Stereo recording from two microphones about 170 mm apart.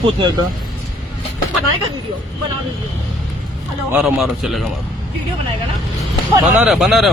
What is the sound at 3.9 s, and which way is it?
Speech, 5° right (ahead or behind).